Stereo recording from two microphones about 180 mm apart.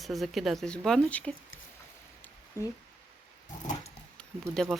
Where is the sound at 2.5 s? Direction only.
15° left (ahead or behind).